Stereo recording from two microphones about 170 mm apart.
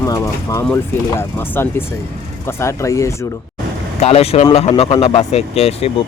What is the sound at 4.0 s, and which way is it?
Speech, 40° left (ahead or behind).